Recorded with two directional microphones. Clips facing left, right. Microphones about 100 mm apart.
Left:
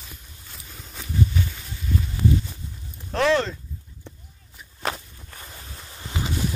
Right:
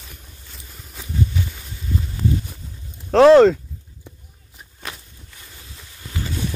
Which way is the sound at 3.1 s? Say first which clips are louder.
Right 11 dB; 90° right.